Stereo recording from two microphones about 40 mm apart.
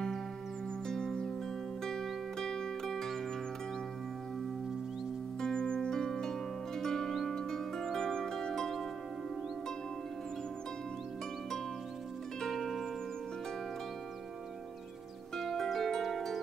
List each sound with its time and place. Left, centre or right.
0.8 s music: centre
5.4 s harp: centre
12.4 s zither: centre
15.3 s harp: centre